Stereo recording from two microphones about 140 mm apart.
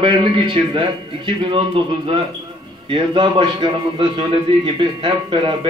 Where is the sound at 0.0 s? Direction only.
35° right (ahead or behind).